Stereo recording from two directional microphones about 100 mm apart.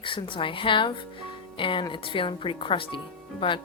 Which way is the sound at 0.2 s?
55° left (ahead or behind).